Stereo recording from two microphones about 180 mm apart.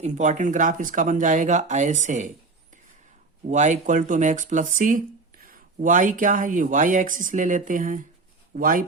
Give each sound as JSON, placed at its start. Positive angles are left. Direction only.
{"t": 0.0, "sound": "speech", "side_deg": -45}
{"t": 3.5, "sound": "speech", "side_deg": -45}